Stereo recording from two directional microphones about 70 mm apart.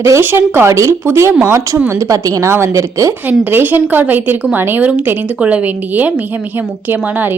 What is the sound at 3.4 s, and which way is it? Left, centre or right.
A woman's voice, right.